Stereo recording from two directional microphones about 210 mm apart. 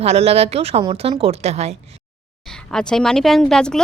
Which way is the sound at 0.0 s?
30° right (ahead or behind).